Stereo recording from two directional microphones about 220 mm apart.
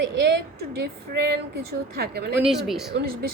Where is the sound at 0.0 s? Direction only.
50° right (ahead or behind).